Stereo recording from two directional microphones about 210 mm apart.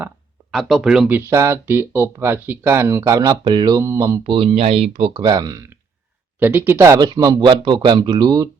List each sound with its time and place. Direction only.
0.5 s speech: centre (ahead or behind); by 8.4 s 20° right (ahead or behind)